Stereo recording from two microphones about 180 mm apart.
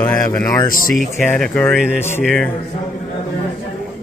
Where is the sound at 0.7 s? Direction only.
50° left (ahead or behind).